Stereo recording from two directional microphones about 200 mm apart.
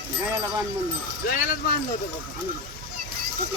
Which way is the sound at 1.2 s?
40° left (ahead or behind).